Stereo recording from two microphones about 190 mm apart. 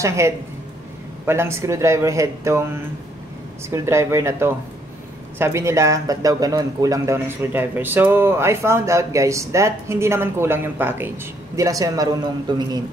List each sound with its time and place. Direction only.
0.0 s a man's voice: 15° right (ahead or behind)
3.7 s a man's voice: 15° right (ahead or behind)